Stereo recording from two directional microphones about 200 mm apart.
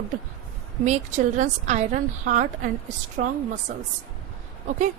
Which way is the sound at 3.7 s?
40° right (ahead or behind).